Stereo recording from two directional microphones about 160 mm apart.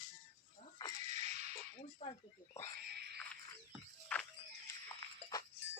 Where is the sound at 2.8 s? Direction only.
85° right.